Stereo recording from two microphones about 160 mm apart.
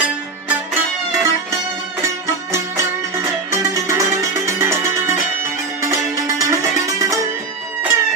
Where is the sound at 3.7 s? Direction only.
20° right (ahead or behind).